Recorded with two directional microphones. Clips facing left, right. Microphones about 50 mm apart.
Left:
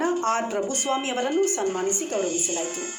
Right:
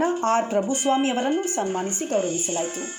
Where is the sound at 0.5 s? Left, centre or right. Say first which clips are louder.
Right 4 dB; centre.